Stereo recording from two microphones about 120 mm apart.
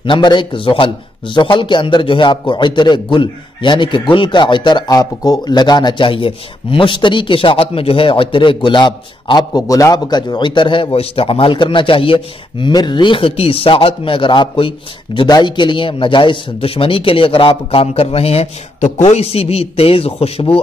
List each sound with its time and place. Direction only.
0.0 s a man's voice: 40° left (ahead or behind)